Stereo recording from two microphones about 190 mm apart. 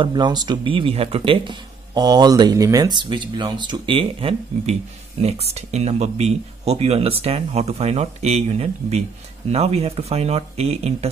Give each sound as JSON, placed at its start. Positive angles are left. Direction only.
{"t": 0.0, "sound": "speech", "side_deg": -20}